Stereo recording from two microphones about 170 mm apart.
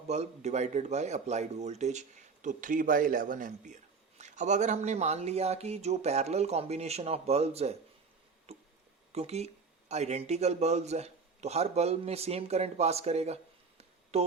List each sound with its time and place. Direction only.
0.1 s speech: 40° right (ahead or behind)
8.5 s a sound: 35° right (ahead or behind)
9.1 s a man's voice: 40° right (ahead or behind)